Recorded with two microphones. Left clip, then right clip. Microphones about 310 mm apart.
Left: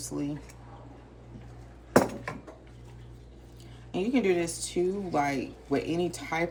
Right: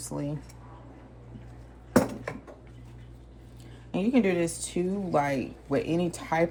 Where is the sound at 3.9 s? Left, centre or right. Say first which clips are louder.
Right 1 dB; right.